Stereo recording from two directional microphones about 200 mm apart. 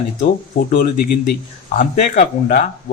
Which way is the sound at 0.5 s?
45° left (ahead or behind).